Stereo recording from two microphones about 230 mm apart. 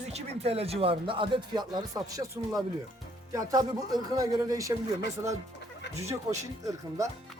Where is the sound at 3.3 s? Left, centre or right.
Centre.